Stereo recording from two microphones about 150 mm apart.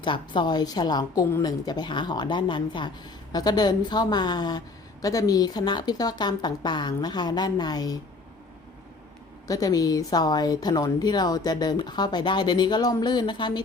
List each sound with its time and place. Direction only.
0.0 s a woman's voice: 30° left (ahead or behind)
9.5 s a woman's voice: 25° left (ahead or behind)